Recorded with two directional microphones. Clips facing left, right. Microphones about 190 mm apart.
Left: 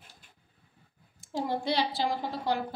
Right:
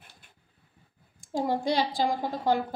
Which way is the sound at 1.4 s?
45° right (ahead or behind).